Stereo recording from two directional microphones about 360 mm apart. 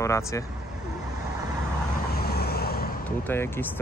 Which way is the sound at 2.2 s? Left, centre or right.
Left.